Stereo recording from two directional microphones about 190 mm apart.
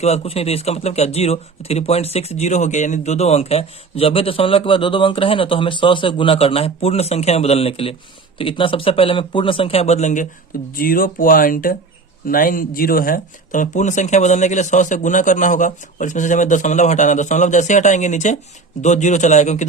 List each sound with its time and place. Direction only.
0.0 s speech: 35° left (ahead or behind)
10.8 s speech: 50° left (ahead or behind)